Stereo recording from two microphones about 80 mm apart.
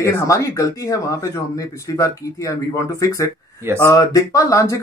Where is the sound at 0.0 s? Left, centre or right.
Left.